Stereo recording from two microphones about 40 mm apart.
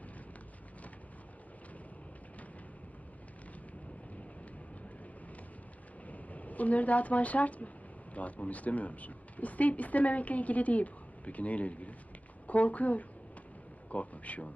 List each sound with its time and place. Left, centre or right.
6.1 s a woman's voice: left